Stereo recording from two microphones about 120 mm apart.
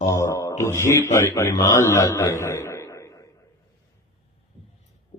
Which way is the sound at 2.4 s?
25° left (ahead or behind).